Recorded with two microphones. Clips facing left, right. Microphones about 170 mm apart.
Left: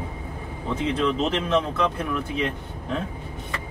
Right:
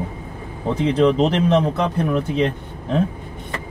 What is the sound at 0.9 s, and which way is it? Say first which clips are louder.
Speech: right 9 dB; 40° right (ahead or behind).